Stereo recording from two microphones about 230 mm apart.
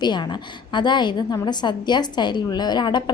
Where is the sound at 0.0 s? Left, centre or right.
Centre.